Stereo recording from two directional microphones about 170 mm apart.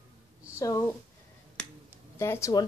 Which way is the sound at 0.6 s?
20° left (ahead or behind).